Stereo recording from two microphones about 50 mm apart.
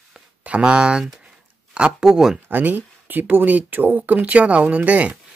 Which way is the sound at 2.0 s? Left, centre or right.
Centre.